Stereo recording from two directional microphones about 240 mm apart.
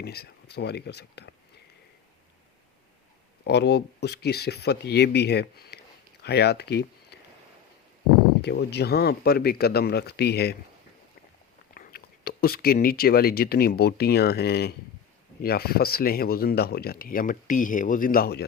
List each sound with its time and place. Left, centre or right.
0.0 s speech: left
3.4 s speech: left
8.4 s speech: left
11.7 s speech: left